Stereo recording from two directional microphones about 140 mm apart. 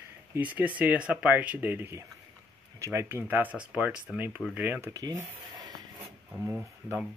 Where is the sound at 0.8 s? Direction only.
10° right (ahead or behind).